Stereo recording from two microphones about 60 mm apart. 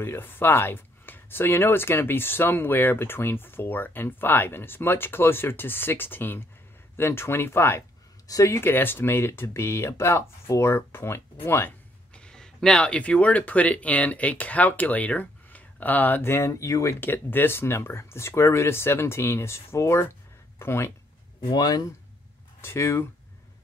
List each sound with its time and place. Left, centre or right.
0.0 s speech: left
8.3 s speech: left
8.5 s speech: left
12.1 s speech: centre
16.2 s a sound: left
17.0 s speech: left
22.6 s speech: left